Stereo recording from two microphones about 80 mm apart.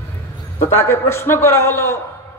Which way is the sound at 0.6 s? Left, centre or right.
Left.